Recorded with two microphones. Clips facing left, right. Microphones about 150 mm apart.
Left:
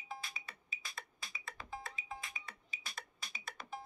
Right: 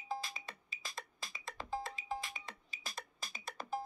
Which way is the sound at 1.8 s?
90° right.